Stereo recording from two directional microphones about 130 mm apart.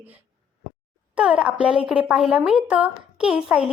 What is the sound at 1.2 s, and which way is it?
Speech, 5° right (ahead or behind).